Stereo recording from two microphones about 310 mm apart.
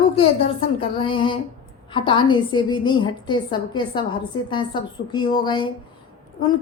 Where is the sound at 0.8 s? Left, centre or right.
Centre.